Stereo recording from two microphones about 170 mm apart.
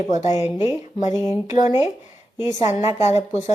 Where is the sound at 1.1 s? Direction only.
20° right (ahead or behind).